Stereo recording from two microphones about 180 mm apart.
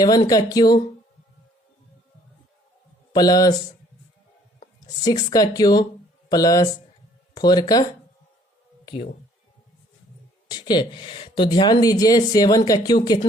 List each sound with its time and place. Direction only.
0.0 s speech: 20° left (ahead or behind)
3.2 s speech: 20° left (ahead or behind)
5.3 s speech: 20° left (ahead or behind)
10.5 s speech: 25° left (ahead or behind)